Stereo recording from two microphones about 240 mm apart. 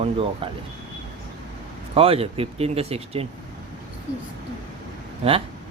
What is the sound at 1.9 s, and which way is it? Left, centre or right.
Speech, right.